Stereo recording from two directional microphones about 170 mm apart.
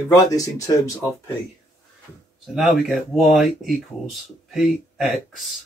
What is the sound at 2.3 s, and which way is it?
Speech, centre (ahead or behind).